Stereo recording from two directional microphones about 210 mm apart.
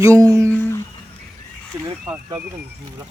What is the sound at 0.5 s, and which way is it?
Humming, 10° left (ahead or behind).